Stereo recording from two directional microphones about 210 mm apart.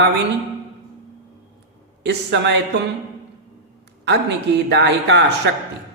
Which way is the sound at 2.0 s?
55° right (ahead or behind).